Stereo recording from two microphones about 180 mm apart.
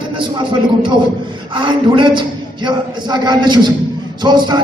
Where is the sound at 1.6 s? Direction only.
25° right (ahead or behind).